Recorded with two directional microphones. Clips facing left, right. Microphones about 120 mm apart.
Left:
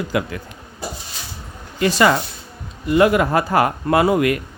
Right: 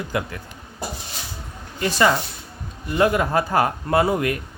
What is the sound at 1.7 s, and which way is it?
Speech, 90° left.